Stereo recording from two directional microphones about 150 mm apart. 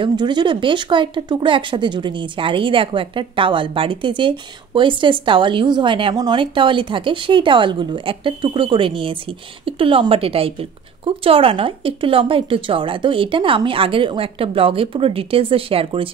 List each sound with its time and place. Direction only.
0.0 s speech: 30° right (ahead or behind)